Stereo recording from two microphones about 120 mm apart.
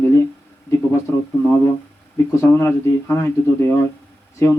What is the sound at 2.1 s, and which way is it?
Speech, 25° left (ahead or behind).